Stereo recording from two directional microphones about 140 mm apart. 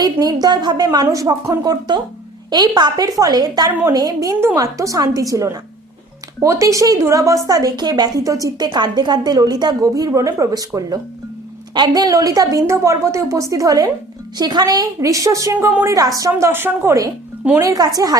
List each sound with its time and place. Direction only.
0.0 s a woman's voice: 30° right (ahead or behind)